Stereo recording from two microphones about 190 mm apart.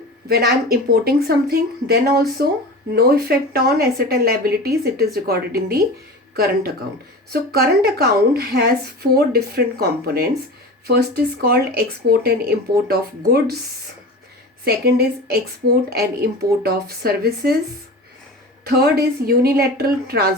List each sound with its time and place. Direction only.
0.3 s a woman's voice: 55° right (ahead or behind)
14.6 s a woman's voice: 55° right (ahead or behind)
18.6 s a woman's voice: 55° right (ahead or behind)